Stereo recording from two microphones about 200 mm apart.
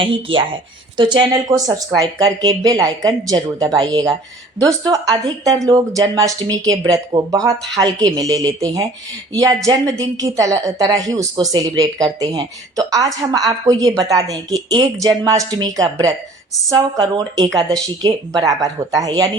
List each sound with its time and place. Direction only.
0.0 s a woman's voice: 25° right (ahead or behind)